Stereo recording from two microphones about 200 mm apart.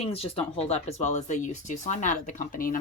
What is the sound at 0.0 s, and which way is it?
Speech, 30° left (ahead or behind).